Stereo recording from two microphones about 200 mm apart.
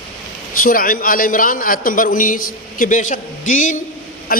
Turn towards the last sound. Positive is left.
turn(degrees=50)  # may be behind; listen again after turning